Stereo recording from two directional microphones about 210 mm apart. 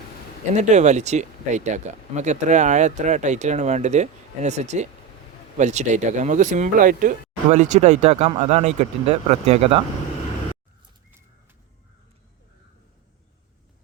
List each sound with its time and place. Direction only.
0.5 s speech: 35° right (ahead or behind)